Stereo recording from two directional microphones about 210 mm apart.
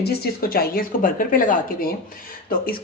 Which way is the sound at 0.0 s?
50° left (ahead or behind).